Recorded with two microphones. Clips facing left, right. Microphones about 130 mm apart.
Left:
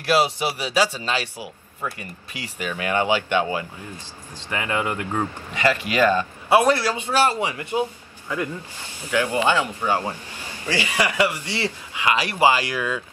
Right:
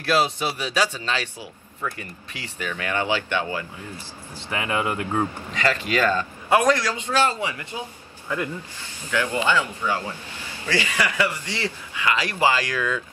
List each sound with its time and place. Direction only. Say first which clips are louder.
0.1 s a man's voice: left 2 dB; 10° left (ahead or behind)
4.4 s speech: even; 10° right (ahead or behind)
5.5 s a man's voice: left 4 dB; 15° left (ahead or behind)
9.8 s speech: left 3 dB; 35° left (ahead or behind)
10.6 s a man's voice: left 1 dB; 15° left (ahead or behind)